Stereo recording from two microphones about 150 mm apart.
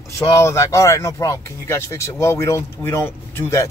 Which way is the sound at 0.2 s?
20° left (ahead or behind).